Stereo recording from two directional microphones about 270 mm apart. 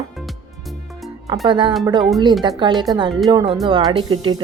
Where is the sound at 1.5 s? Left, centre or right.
Centre.